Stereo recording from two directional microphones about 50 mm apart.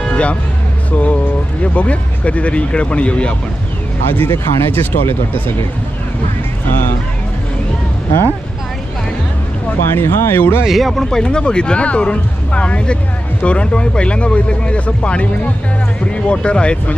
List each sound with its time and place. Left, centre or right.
0.1 s music: left
0.9 s speech: left
4.1 s speech: left
9.6 s speech: left
10.7 s speech: centre
11.0 s speech: centre